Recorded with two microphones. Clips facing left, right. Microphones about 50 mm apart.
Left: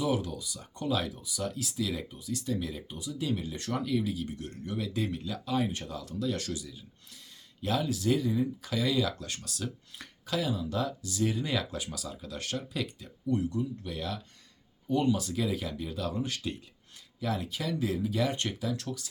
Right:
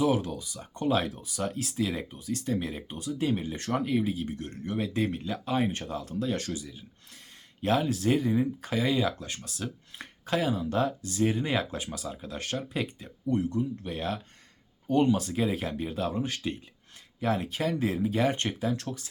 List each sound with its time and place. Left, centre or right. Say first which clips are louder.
0.0 s speech: right 4 dB; right
10.2 s speech: right 4 dB; right